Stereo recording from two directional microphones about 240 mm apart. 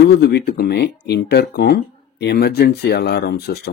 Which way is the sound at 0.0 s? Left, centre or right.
Left.